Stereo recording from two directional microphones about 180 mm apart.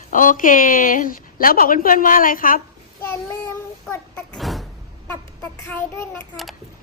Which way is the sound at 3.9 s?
5° left (ahead or behind).